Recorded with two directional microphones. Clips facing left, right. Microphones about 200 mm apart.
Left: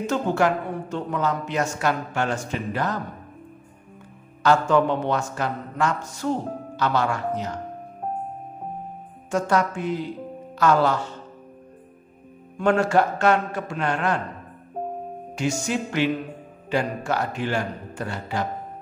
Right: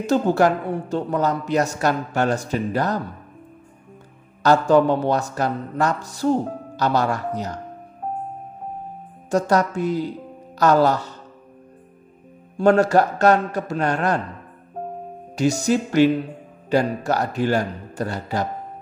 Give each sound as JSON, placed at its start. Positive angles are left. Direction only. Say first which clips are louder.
{"t": 0.0, "sound": "a man's voice", "louder": "right 4 dB", "side_deg": -35}
{"t": 4.4, "sound": "a man's voice", "louder": "right 3 dB", "side_deg": -35}
{"t": 9.3, "sound": "a man's voice", "louder": "right 3 dB", "side_deg": -40}
{"t": 12.5, "sound": "a man's voice", "louder": "right 4 dB", "side_deg": -40}
{"t": 15.3, "sound": "a man's voice", "louder": "right 6 dB", "side_deg": -35}